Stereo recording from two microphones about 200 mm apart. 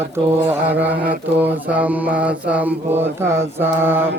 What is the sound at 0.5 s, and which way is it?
Mantra, 10° right (ahead or behind).